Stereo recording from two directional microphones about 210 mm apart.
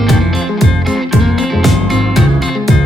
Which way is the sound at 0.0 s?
Centre (ahead or behind).